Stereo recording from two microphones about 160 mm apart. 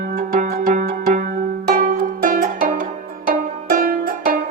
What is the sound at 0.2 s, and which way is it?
Music, 60° right (ahead or behind).